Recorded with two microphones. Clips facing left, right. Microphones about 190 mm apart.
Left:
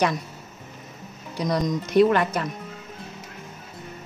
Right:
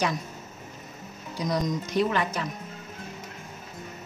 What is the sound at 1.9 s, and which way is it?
Speech, 60° left (ahead or behind).